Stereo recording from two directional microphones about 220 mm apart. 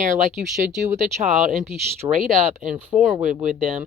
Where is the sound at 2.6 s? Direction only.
5° right (ahead or behind).